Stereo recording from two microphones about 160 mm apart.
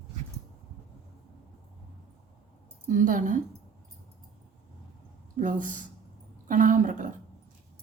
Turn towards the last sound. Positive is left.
turn(degrees=-55)  # may be behind; listen again after turning